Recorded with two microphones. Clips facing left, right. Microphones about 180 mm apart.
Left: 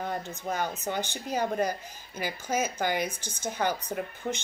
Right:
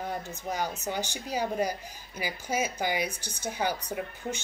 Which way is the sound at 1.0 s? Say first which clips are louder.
Left 1 dB; 55° left (ahead or behind).